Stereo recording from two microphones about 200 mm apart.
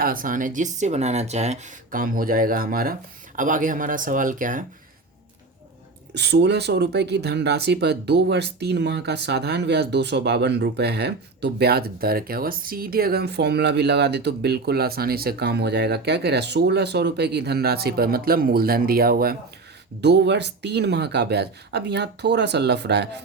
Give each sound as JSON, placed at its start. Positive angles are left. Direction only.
{"t": 0.0, "sound": "speech", "side_deg": -45}
{"t": 6.1, "sound": "speech", "side_deg": -55}
{"t": 20.0, "sound": "speech", "side_deg": -60}